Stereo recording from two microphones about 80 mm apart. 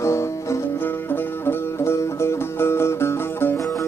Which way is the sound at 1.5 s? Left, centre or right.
Left.